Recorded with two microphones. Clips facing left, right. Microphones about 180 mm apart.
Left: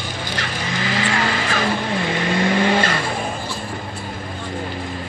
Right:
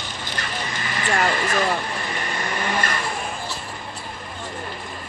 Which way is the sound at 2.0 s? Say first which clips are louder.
Left 9 dB; 80° left.